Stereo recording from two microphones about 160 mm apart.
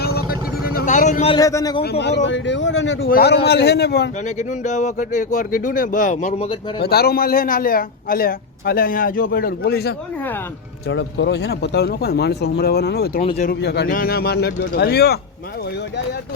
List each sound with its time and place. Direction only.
0.0 s vehicle: 75° left (ahead or behind); by 1.3 s 50° left (ahead or behind)
1.3 s a man's voice: 20° left (ahead or behind)
1.8 s a man's voice: 90° left
4.4 s speech: 45° left (ahead or behind)
6.3 s speech: 35° left (ahead or behind)
6.8 s a man's voice: 75° left (ahead or behind)
11.3 s a man's voice: 90° left
13.2 s speech: 40° left (ahead or behind)
13.5 s speech: 90° left